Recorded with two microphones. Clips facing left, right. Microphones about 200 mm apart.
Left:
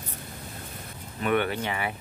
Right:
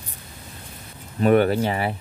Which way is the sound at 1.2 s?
40° right (ahead or behind).